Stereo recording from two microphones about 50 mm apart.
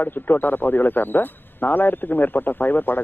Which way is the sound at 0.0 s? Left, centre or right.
Left.